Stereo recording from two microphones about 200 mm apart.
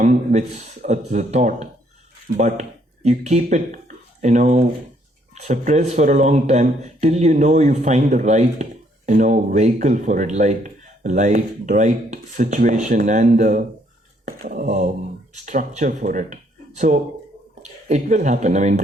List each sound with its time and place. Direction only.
0.0 s speech: 40° right (ahead or behind)